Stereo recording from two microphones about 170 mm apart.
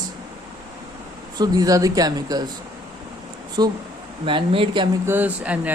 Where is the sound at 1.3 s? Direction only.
25° right (ahead or behind).